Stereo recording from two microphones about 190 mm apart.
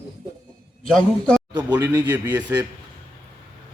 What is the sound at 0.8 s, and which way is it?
Speech, 5° left (ahead or behind).